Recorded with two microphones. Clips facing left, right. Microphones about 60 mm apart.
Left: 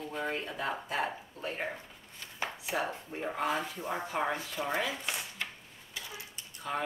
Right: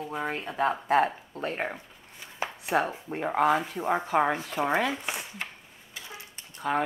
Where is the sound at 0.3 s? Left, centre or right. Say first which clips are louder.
Right 10 dB; right.